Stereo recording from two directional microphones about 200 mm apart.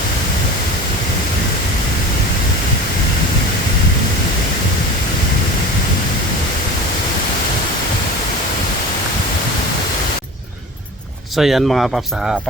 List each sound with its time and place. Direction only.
11.3 s speech: centre (ahead or behind)